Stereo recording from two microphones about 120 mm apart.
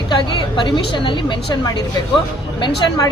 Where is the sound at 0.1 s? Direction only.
40° left (ahead or behind).